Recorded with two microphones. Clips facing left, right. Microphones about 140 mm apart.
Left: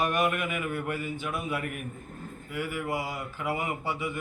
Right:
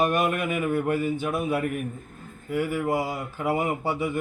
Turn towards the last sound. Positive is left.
turn(degrees=-40)  # may be behind; listen again after turning